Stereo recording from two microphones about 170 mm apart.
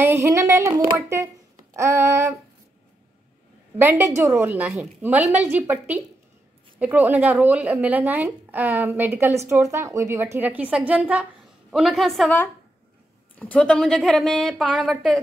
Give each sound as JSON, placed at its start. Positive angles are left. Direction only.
{"t": 0.0, "sound": "a woman's voice", "side_deg": -15}
{"t": 3.7, "sound": "a woman's voice", "side_deg": -15}
{"t": 13.4, "sound": "a woman's voice", "side_deg": 5}